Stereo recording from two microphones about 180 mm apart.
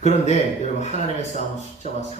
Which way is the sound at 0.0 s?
40° left (ahead or behind).